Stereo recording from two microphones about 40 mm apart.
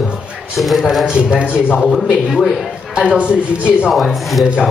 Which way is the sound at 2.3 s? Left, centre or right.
Centre.